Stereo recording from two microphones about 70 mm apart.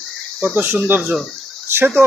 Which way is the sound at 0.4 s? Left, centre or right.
Right.